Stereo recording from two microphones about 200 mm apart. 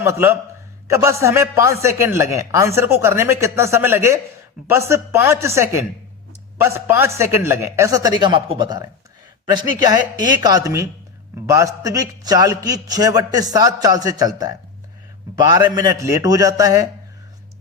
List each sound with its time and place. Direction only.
0.0 s speech: 15° right (ahead or behind)
15.5 s speech: 20° right (ahead or behind)